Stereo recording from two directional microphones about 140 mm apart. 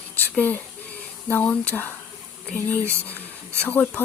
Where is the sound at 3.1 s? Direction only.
10° left (ahead or behind).